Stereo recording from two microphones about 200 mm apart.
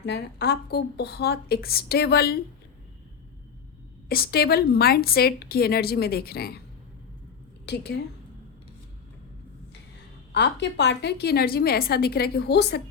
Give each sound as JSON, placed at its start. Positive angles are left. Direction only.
{"t": 0.0, "sound": "a woman's voice", "side_deg": 55}
{"t": 4.1, "sound": "a woman's voice", "side_deg": 50}
{"t": 7.6, "sound": "a woman's voice", "side_deg": 60}
{"t": 10.3, "sound": "a woman's voice", "side_deg": 60}